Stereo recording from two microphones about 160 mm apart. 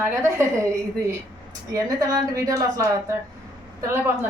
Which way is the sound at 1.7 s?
20° right (ahead or behind).